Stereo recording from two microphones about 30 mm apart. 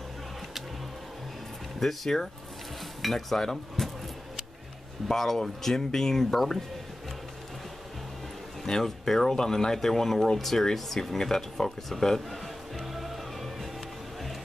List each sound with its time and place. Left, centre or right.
1.8 s speech: centre
3.0 s cutlery: centre
5.0 s speech: centre
8.6 s speech: centre